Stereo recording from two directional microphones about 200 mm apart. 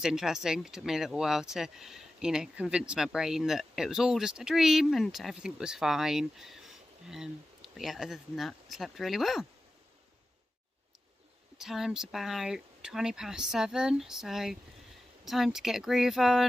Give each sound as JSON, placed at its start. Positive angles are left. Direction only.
{"t": 0.0, "sound": "speech", "side_deg": -5}
{"t": 11.5, "sound": "speech", "side_deg": 0}